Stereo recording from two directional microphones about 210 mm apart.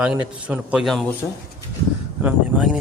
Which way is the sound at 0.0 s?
5° right (ahead or behind).